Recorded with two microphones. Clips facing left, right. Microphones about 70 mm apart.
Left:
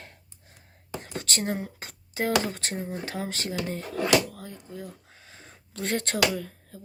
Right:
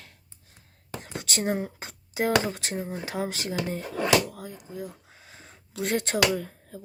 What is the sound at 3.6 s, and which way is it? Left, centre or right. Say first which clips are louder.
Drawer open or close: right 2 dB; centre.